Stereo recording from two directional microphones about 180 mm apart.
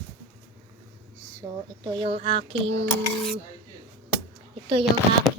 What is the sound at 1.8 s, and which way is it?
Speech, 25° right (ahead or behind).